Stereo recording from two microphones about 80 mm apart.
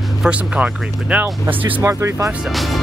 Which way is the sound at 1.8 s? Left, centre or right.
Right.